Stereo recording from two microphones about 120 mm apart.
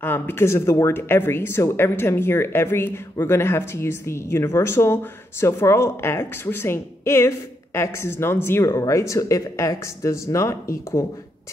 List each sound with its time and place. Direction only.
0.0 s speech: 20° left (ahead or behind)